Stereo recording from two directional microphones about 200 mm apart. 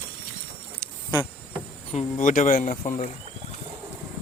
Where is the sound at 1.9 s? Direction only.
35° left (ahead or behind).